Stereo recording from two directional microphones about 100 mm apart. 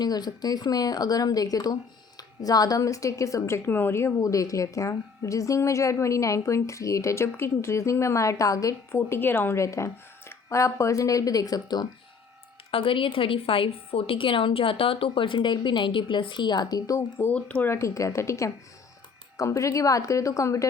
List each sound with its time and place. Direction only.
0.0 s speech: 40° left (ahead or behind)
12.7 s a woman's voice: 60° left (ahead or behind); by 17.2 s 35° left (ahead or behind)
17.2 s speech: 15° left (ahead or behind)
17.7 s a woman's voice: 30° left (ahead or behind)